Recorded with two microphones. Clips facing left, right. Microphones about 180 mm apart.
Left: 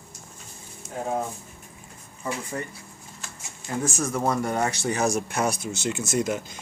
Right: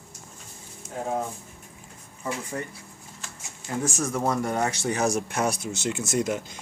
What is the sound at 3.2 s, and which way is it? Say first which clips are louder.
Speech: left 1 dB; 5° right (ahead or behind).